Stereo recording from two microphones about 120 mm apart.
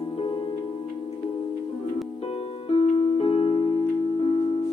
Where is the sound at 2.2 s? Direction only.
55° left (ahead or behind).